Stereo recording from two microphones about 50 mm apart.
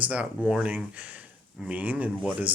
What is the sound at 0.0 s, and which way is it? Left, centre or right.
Speech, right.